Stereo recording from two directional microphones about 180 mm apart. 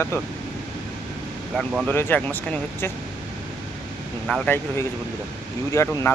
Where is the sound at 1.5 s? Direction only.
5° right (ahead or behind).